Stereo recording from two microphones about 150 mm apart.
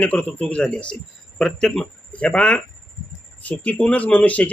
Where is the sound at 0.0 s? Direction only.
10° left (ahead or behind).